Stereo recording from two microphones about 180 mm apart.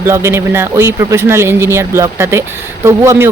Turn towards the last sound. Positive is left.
turn(degrees=-15)  # may be behind; listen again after turning